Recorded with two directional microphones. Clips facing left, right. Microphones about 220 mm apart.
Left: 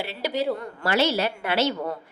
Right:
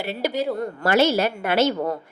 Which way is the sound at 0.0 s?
45° right (ahead or behind).